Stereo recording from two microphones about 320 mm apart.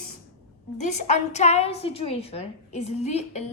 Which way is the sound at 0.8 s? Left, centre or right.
Left.